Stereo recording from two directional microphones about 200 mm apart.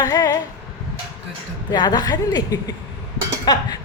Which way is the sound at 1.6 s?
20° left (ahead or behind).